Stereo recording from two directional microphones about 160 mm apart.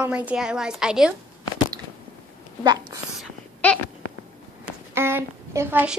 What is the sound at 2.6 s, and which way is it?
Whispering, 25° right (ahead or behind).